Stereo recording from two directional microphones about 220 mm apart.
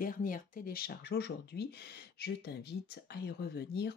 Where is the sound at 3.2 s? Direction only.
45° left (ahead or behind).